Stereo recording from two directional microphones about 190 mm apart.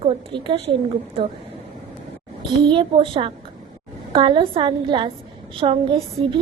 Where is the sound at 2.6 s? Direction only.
25° right (ahead or behind).